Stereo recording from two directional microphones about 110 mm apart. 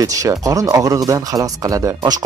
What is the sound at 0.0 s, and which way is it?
Speech, 35° right (ahead or behind).